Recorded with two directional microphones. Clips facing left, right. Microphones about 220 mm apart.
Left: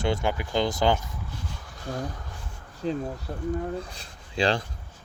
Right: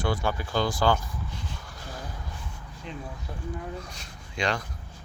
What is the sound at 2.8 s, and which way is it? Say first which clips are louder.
Speech: left 10 dB; 35° left (ahead or behind).